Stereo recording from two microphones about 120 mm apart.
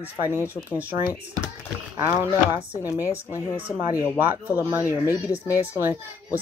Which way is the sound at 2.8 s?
25° left (ahead or behind).